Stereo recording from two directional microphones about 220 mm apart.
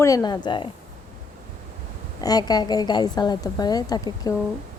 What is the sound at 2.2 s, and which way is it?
Speech, 20° left (ahead or behind).